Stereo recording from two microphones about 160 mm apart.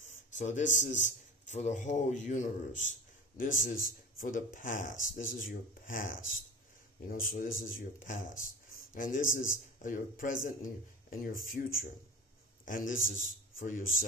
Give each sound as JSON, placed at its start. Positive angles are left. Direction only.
{"t": 0.0, "sound": "a man's voice", "side_deg": 50}
{"t": 12.6, "sound": "a man's voice", "side_deg": 55}